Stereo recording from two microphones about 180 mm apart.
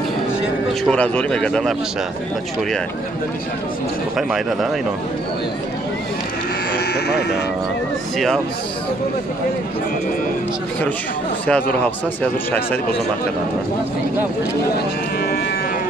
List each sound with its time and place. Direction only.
0.8 s speech: 5° left (ahead or behind)
4.3 s speech: centre (ahead or behind)
6.9 s speech: 65° left (ahead or behind)
11.8 s speech: 10° left (ahead or behind)